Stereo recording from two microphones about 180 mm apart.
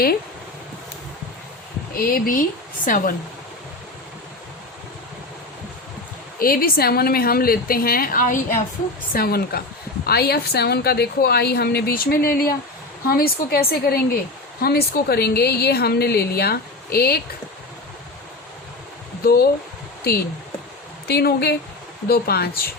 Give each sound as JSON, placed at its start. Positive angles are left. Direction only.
{"t": 1.9, "sound": "speech", "side_deg": 50}
{"t": 6.4, "sound": "a woman's voice", "side_deg": 55}
{"t": 19.2, "sound": "a woman's voice", "side_deg": 60}
{"t": 21.1, "sound": "a woman's voice", "side_deg": 60}